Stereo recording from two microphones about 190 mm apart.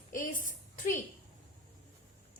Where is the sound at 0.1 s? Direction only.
45° left (ahead or behind).